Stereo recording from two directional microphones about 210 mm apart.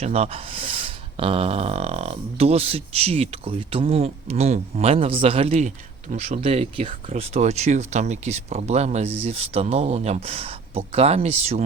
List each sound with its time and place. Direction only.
0.0 s speech: 30° right (ahead or behind)